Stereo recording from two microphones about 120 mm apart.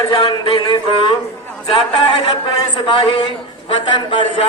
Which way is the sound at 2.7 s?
40° left (ahead or behind).